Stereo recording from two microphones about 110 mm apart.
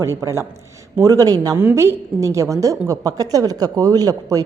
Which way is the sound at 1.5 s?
20° right (ahead or behind).